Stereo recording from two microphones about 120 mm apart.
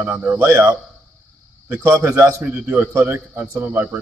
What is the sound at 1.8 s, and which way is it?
Speech, 30° right (ahead or behind).